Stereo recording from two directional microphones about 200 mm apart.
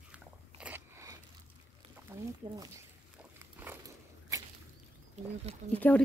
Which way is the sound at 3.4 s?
10° right (ahead or behind).